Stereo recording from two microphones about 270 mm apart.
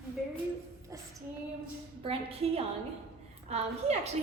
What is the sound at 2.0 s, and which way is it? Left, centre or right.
A woman's voice, right.